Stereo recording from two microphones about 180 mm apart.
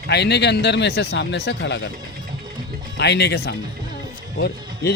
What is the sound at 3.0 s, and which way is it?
Speech, 70° left (ahead or behind).